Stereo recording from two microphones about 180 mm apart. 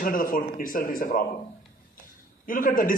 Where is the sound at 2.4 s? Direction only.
50° left (ahead or behind).